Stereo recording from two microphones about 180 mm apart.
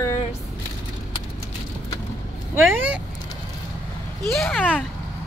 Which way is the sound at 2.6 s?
10° right (ahead or behind).